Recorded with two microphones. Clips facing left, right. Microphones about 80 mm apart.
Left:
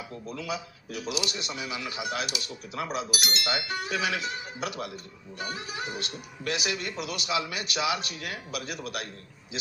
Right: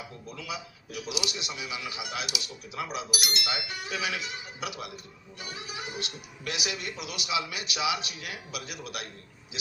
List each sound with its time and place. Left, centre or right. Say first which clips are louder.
0.3 s speech: left 4 dB; left